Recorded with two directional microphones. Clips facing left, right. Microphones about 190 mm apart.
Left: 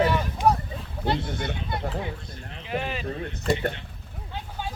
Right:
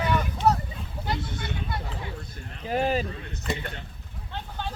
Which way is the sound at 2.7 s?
40° right (ahead or behind).